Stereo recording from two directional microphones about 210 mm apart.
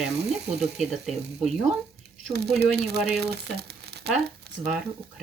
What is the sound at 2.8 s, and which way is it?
Speech, 50° right (ahead or behind).